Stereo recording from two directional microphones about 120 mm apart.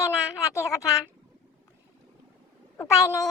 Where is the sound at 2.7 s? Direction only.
20° left (ahead or behind).